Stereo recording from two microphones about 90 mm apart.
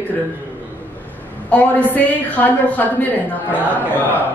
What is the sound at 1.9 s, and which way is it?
A woman's voice, 20° left (ahead or behind).